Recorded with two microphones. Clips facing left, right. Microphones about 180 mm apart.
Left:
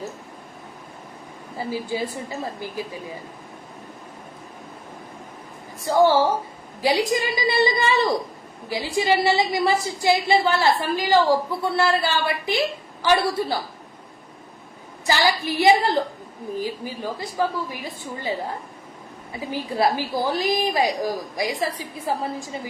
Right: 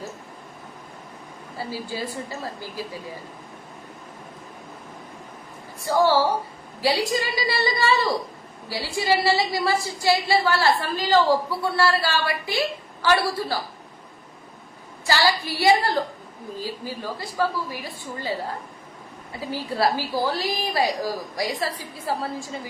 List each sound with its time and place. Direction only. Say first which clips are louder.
1.5 s a woman's voice: left 4 dB; 20° left (ahead or behind)
5.8 s a woman's voice: left 2 dB; 20° left (ahead or behind)
15.0 s a woman's voice: left 1 dB; 20° left (ahead or behind)